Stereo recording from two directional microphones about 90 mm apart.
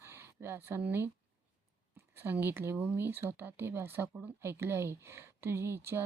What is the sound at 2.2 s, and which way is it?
Speech, 25° right (ahead or behind).